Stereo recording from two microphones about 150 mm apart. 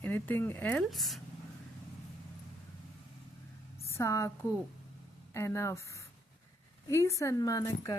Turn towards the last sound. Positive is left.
turn(degrees=20)  # may be behind; listen again after turning